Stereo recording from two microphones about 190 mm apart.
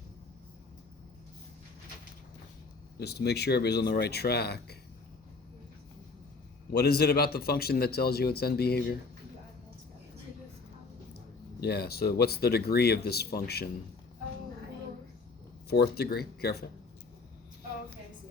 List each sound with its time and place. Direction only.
3.0 s speech: 60° left (ahead or behind)
6.7 s speech: 55° left (ahead or behind)
11.6 s speech: 55° left (ahead or behind)
15.7 s speech: 55° left (ahead or behind)